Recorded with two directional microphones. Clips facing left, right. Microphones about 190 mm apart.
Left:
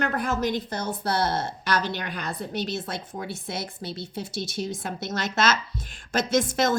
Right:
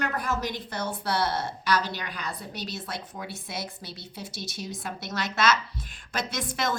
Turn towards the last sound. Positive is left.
turn(degrees=45)  # may be behind; listen again after turning